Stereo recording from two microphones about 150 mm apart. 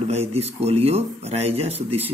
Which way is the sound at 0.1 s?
45° right (ahead or behind).